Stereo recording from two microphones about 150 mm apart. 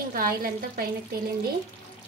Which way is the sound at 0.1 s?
75° right (ahead or behind).